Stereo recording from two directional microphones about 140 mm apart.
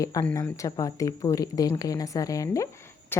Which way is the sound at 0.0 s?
25° left (ahead or behind).